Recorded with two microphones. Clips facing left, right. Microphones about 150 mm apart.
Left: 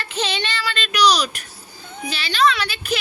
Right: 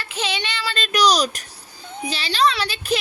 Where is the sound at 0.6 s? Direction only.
35° right (ahead or behind).